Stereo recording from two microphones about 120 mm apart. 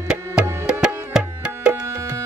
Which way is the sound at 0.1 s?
5° right (ahead or behind).